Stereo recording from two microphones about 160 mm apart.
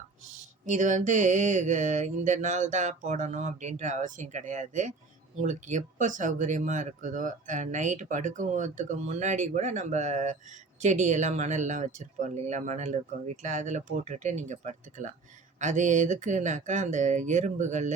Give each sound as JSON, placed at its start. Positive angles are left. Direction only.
{"t": 0.6, "sound": "speech", "side_deg": -50}